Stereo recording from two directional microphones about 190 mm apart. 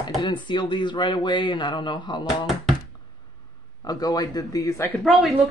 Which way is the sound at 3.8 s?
20° left (ahead or behind).